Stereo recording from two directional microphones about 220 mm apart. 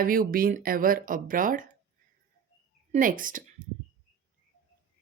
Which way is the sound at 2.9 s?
40° right (ahead or behind).